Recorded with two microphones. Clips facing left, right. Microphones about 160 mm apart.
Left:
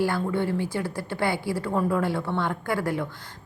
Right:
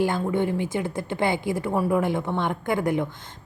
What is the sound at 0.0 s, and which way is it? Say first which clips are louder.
A woman's voice: right 2 dB; 20° right (ahead or behind).